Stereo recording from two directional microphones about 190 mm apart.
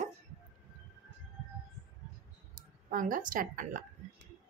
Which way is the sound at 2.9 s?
45° right (ahead or behind).